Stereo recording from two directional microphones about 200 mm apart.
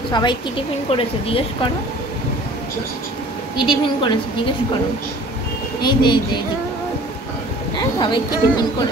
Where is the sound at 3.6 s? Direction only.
25° left (ahead or behind).